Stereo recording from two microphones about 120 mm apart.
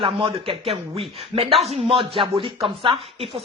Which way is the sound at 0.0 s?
50° right (ahead or behind).